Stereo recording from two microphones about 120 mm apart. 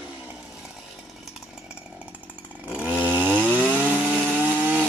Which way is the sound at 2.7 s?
15° right (ahead or behind).